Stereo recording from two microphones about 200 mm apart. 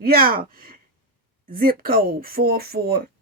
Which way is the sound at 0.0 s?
50° right (ahead or behind).